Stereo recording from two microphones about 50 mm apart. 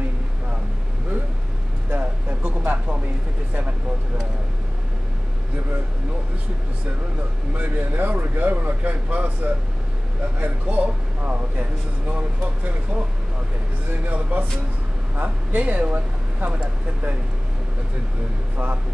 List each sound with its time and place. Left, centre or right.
1.9 s a sound: right
7.5 s speech: right
14.0 s speech: right